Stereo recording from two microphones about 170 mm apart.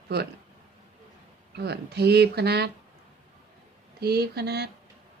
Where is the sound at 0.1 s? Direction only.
75° right (ahead or behind).